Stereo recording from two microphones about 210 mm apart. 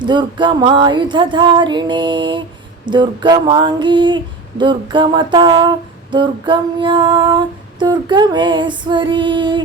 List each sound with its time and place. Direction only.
0.0 s female singing: 20° right (ahead or behind)